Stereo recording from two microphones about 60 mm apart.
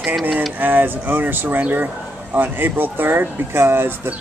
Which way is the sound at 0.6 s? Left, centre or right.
Right.